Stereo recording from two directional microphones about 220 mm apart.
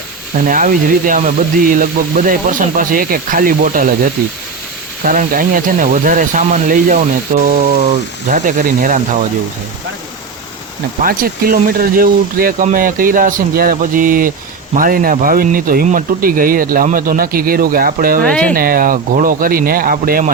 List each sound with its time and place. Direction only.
0.3 s speech: 35° right (ahead or behind)
11.0 s speech: 40° right (ahead or behind)
18.3 s speech: 5° left (ahead or behind)
18.5 s speech: 40° right (ahead or behind)